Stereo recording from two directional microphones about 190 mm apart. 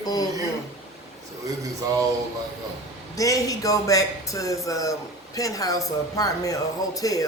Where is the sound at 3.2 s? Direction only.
20° left (ahead or behind).